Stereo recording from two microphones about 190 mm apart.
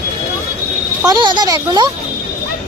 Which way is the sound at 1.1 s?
25° right (ahead or behind).